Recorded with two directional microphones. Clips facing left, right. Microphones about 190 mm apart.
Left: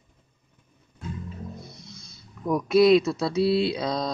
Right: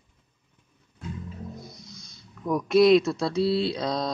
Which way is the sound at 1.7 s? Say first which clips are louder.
Left 1 dB; centre (ahead or behind).